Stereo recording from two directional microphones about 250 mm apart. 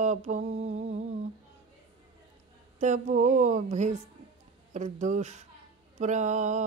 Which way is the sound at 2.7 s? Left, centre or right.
Right.